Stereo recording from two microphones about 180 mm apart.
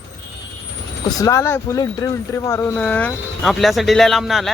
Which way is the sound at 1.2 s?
15° left (ahead or behind).